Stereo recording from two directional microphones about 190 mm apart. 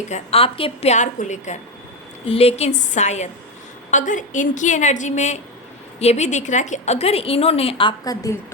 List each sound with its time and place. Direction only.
0.1 s a woman's voice: 30° left (ahead or behind)